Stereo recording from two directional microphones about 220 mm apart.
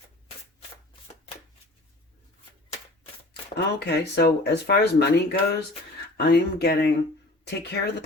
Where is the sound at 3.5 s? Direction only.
50° left (ahead or behind).